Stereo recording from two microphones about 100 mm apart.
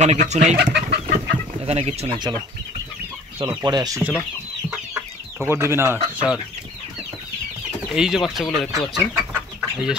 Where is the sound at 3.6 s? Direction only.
40° right (ahead or behind).